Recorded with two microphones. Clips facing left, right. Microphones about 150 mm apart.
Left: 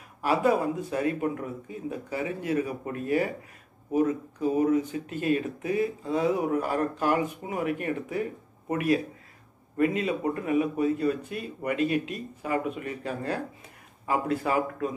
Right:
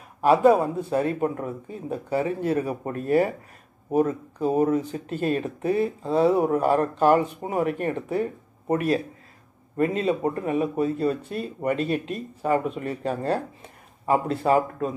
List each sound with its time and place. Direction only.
0.3 s speech: 30° right (ahead or behind)